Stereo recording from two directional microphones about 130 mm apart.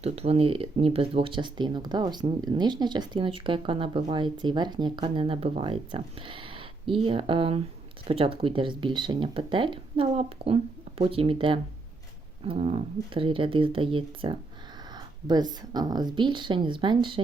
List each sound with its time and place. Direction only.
0.0 s speech: 50° right (ahead or behind)